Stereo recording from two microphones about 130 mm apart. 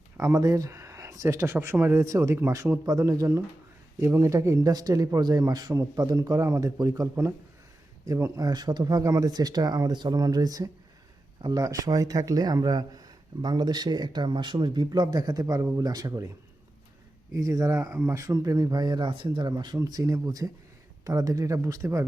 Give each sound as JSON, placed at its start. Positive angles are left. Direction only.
{"t": 0.2, "sound": "speech", "side_deg": -25}
{"t": 17.3, "sound": "speech", "side_deg": -25}